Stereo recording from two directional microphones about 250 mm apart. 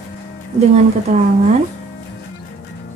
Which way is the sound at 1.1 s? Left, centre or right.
Right.